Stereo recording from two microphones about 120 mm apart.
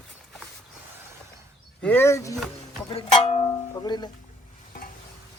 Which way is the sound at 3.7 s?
35° left (ahead or behind).